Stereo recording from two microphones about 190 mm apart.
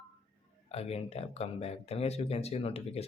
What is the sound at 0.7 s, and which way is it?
Speech, 30° left (ahead or behind).